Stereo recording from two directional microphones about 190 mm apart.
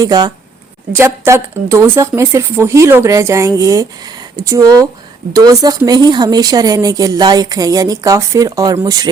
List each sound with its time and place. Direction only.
0.0 s speech: 20° right (ahead or behind)